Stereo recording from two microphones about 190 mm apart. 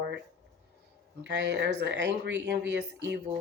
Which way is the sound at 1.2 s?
70° right (ahead or behind).